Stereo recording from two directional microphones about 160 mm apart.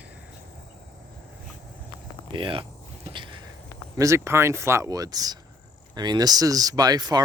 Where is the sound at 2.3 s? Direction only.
30° right (ahead or behind).